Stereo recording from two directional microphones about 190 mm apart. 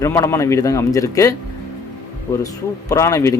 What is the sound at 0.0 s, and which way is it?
Speech, 15° left (ahead or behind).